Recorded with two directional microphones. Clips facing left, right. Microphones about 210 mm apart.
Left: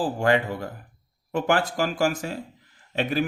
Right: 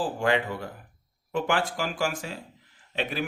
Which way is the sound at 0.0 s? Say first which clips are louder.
Left 3 dB; 40° left (ahead or behind).